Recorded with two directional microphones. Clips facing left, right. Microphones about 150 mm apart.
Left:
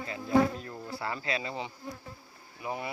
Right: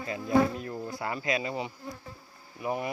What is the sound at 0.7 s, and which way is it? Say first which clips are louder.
Speech: right 2 dB; 15° right (ahead or behind).